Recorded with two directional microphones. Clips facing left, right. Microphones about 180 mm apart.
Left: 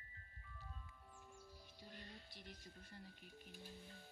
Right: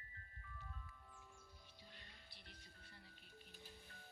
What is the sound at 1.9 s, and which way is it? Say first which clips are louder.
Speech: left 7 dB; 45° left (ahead or behind).